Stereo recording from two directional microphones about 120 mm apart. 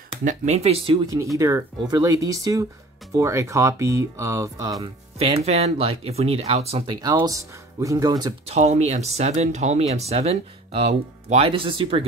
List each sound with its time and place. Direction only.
0.2 s speech: 80° right; by 0.9 s 60° right (ahead or behind)
1.0 s speech: 25° right (ahead or behind)
5.4 s speech: 60° right (ahead or behind)
6.9 s speech: 35° right (ahead or behind)
8.5 s speech: 65° right (ahead or behind); by 12.0 s 45° right (ahead or behind)